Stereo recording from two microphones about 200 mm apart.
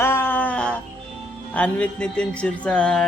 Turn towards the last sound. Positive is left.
turn(degrees=5)  # may be behind; listen again after turning